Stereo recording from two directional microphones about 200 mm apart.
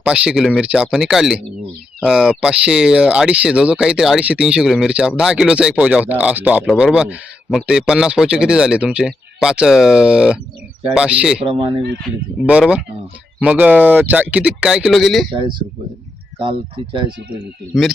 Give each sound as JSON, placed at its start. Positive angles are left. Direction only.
{"t": 0.0, "sound": "speech", "side_deg": -5}
{"t": 11.4, "sound": "speech", "side_deg": -25}
{"t": 12.5, "sound": "speech", "side_deg": -5}
{"t": 15.3, "sound": "speech", "side_deg": -25}
{"t": 17.1, "sound": "speech", "side_deg": -55}